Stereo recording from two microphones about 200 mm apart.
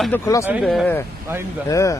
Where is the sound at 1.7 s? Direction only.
15° left (ahead or behind).